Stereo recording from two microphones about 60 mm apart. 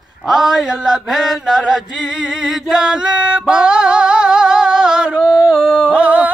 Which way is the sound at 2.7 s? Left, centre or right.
Centre.